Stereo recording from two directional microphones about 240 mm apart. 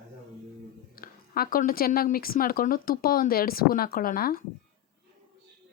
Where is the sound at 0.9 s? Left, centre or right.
Left.